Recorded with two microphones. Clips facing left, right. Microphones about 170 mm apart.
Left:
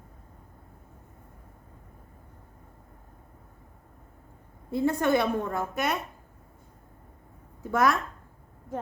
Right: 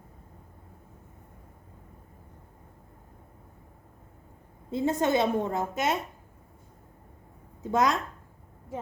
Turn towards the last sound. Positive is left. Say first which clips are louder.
# left 1 dB
turn(degrees=-20)  # may be behind; listen again after turning